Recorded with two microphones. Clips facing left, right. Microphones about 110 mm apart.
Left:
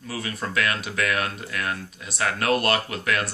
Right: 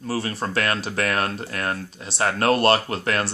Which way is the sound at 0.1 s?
35° right (ahead or behind).